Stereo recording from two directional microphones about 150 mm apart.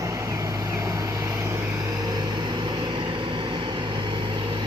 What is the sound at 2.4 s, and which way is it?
Vehicle, 30° right (ahead or behind).